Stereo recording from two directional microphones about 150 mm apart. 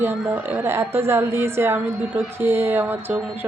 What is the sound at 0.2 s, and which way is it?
Speech, 10° right (ahead or behind).